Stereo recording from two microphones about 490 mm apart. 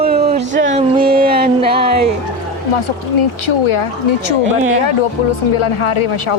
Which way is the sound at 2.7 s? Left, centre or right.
Left.